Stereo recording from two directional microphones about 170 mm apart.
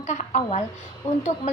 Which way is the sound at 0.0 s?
45° left (ahead or behind).